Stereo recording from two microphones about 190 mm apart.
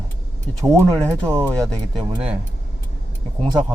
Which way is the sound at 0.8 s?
10° left (ahead or behind).